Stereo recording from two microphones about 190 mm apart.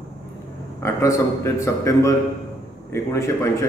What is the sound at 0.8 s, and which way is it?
A man's voice, 15° left (ahead or behind).